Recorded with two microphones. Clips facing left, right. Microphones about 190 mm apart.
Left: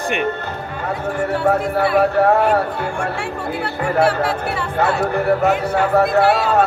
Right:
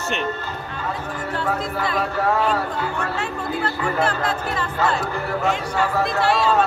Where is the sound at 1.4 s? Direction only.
65° left (ahead or behind).